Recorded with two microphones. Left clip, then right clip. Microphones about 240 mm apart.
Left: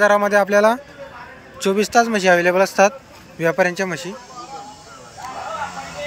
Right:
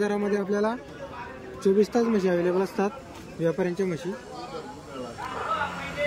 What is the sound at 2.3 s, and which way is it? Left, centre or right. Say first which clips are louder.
Speech: left 10 dB; left.